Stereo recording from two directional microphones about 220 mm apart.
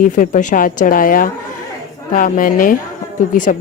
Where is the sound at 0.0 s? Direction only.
40° left (ahead or behind).